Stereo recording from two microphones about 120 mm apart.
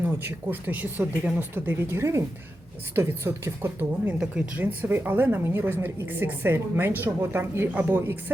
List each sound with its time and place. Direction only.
0.0 s a woman's voice: 15° right (ahead or behind)